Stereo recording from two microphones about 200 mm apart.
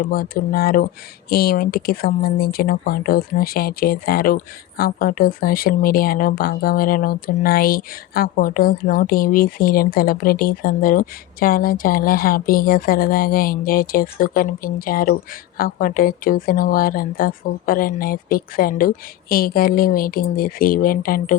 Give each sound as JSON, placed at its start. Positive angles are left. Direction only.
{"t": 0.0, "sound": "speech", "side_deg": 45}